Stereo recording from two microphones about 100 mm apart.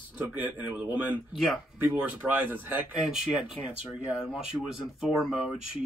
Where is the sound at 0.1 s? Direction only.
15° right (ahead or behind).